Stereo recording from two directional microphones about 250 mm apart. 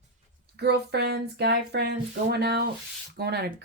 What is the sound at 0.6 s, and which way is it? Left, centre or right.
Speech, right.